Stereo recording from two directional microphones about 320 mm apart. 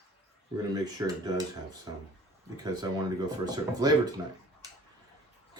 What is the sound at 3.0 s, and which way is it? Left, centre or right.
Speech, centre.